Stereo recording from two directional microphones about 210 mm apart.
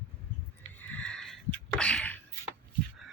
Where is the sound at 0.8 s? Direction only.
5° left (ahead or behind).